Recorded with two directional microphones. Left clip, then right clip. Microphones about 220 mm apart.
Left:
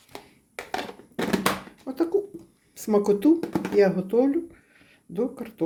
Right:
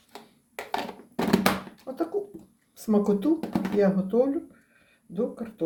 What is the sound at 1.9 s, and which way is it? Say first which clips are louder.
Speech: left 5 dB; 50° left (ahead or behind).